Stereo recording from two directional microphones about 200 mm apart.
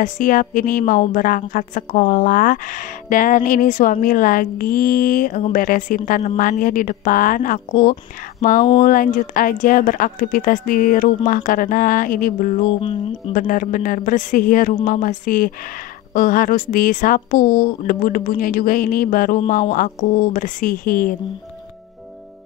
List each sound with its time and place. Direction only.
0.0 s a woman's voice: 40° left (ahead or behind)
12.6 s a sound: 25° left (ahead or behind)
13.3 s a woman's voice: 40° left (ahead or behind)